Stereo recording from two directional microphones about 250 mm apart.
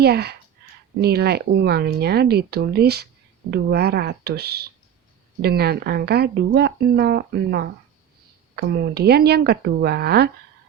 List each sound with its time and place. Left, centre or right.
0.0 s speech: right